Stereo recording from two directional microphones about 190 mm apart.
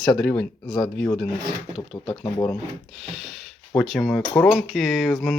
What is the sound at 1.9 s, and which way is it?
Speech, 25° left (ahead or behind).